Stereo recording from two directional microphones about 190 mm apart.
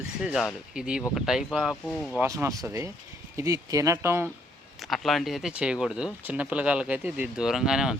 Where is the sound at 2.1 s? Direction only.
15° right (ahead or behind).